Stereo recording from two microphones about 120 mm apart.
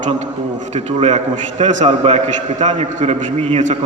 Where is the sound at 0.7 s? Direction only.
70° right (ahead or behind).